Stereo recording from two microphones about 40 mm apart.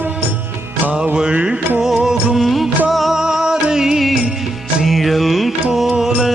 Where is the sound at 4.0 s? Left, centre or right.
Centre.